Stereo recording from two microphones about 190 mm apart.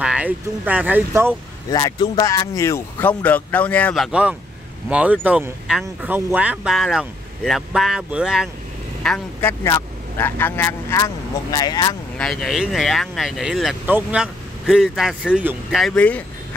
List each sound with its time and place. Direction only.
0.0 s speech: 5° right (ahead or behind)
1.7 s speech: 20° left (ahead or behind); by 8.5 s 5° right (ahead or behind)
9.0 s speech: 5° left (ahead or behind)
12.2 s speech: centre (ahead or behind)